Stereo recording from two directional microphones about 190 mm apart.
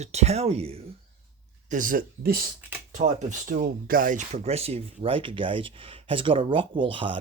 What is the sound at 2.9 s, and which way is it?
Speech, 40° right (ahead or behind).